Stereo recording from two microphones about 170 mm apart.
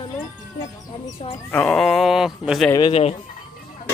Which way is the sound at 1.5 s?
5° left (ahead or behind).